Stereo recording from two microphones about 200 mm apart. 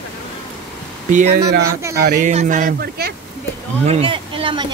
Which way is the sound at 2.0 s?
40° right (ahead or behind).